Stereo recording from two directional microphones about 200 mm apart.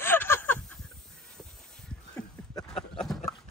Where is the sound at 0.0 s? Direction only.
10° left (ahead or behind).